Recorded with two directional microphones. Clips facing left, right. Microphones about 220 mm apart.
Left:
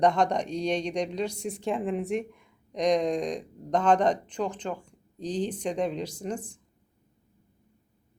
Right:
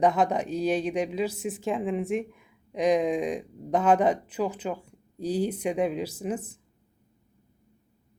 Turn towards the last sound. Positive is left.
turn(degrees=-5)  # may be behind; listen again after turning